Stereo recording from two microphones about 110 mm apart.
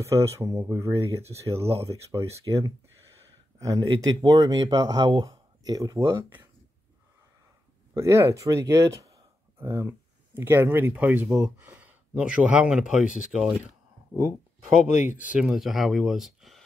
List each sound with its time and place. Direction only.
0.0 s speech: 30° right (ahead or behind)
7.9 s speech: 25° right (ahead or behind); by 13.6 s 5° right (ahead or behind)
15.0 s speech: 10° right (ahead or behind)